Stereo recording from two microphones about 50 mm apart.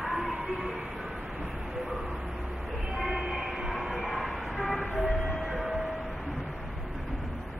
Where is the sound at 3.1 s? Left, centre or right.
Centre.